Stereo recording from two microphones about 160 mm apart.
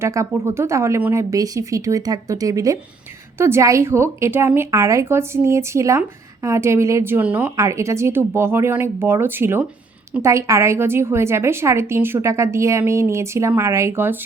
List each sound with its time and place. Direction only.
0.0 s a woman's voice: 20° right (ahead or behind)